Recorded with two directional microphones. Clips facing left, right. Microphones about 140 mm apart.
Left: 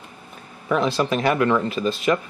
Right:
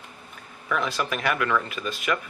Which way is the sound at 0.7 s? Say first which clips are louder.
Left 6 dB; 30° left (ahead or behind).